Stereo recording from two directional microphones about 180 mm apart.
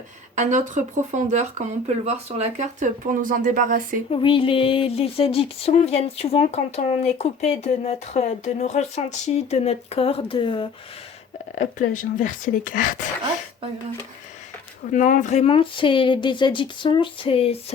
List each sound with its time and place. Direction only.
0.3 s speech: 40° right (ahead or behind)
4.1 s speech: 30° left (ahead or behind)
11.5 s speech: 45° left (ahead or behind)
14.9 s speech: 45° left (ahead or behind)